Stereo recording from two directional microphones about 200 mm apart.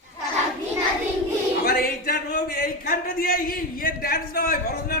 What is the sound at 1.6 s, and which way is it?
A man's voice, 50° left (ahead or behind).